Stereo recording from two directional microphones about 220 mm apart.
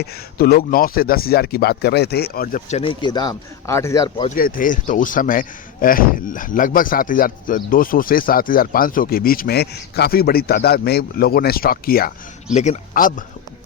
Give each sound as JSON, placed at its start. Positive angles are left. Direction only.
{"t": 0.0, "sound": "speech", "side_deg": 45}
{"t": 4.4, "sound": "speech", "side_deg": 40}
{"t": 12.5, "sound": "speech", "side_deg": 30}